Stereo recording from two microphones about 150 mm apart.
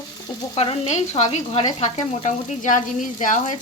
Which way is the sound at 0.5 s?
40° left (ahead or behind).